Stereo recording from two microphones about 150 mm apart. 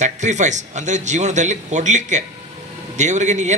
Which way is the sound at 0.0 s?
50° right (ahead or behind).